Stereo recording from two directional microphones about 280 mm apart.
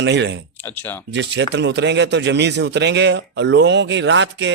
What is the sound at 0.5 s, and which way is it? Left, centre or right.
Speech, centre.